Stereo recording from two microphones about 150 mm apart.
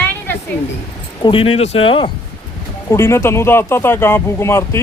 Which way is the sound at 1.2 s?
35° left (ahead or behind).